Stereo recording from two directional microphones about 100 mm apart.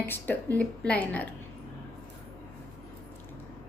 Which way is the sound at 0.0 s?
20° left (ahead or behind).